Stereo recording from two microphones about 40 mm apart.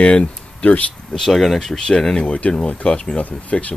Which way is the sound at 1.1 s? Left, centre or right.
Centre.